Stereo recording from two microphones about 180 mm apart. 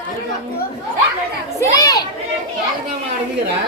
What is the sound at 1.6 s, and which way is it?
Children playing, 20° left (ahead or behind).